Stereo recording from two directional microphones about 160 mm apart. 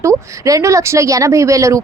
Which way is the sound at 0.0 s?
20° right (ahead or behind).